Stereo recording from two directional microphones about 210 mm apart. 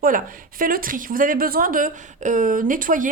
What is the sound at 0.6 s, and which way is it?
Speech, 40° right (ahead or behind).